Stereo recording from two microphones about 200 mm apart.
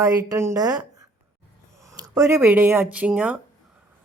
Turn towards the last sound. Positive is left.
turn(degrees=-5)  # may be behind; listen again after turning